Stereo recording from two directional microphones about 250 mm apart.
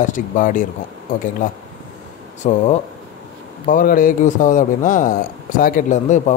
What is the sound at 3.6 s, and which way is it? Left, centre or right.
A man's voice, left.